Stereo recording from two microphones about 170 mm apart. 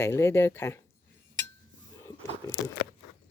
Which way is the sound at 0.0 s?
15° left (ahead or behind).